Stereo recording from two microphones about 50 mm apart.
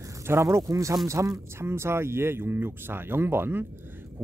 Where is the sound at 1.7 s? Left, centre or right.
Right.